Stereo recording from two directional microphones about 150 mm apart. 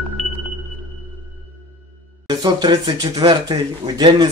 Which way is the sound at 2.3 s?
25° right (ahead or behind).